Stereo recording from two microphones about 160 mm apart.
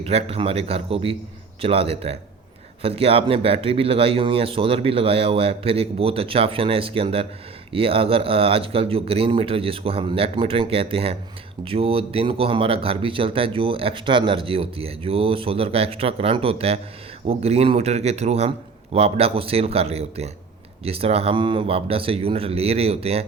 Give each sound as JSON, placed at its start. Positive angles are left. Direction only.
{"t": 0.0, "sound": "speech", "side_deg": -40}